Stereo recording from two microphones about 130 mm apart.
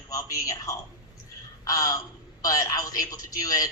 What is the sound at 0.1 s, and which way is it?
A woman's voice, 25° left (ahead or behind).